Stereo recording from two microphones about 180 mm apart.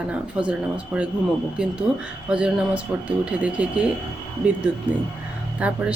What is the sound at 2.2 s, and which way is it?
Speech, 5° right (ahead or behind).